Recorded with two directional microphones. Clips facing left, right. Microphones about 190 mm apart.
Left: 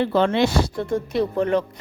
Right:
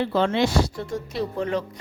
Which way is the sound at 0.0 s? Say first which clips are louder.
Left 3 dB; 55° left (ahead or behind).